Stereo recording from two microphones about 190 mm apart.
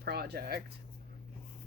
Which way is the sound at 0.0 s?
55° right (ahead or behind).